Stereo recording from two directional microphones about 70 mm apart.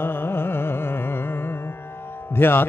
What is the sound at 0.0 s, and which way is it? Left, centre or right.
Carnatic music, left.